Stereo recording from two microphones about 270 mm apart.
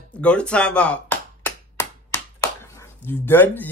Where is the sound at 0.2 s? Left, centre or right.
Centre.